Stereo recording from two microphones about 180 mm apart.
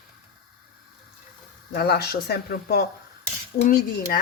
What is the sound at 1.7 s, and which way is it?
Speech, 60° left (ahead or behind).